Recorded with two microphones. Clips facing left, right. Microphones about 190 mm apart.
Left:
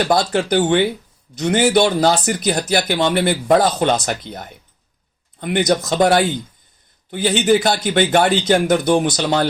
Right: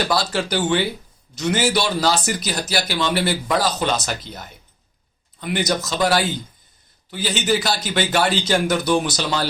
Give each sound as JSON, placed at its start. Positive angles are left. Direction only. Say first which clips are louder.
{"t": 0.1, "sound": "a man's voice", "louder": "left 5 dB", "side_deg": 50}